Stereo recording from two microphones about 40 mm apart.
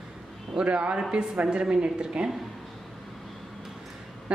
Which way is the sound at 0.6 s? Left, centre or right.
Right.